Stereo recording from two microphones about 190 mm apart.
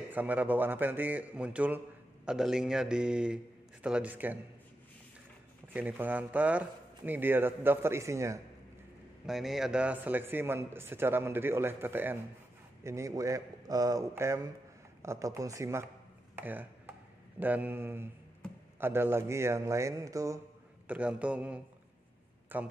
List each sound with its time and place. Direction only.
0.1 s a man's voice: 10° right (ahead or behind)
5.7 s a man's voice: 10° right (ahead or behind)
9.2 s a man's voice: centre (ahead or behind)
16.3 s a sound: 10° right (ahead or behind)
17.4 s a man's voice: 10° right (ahead or behind)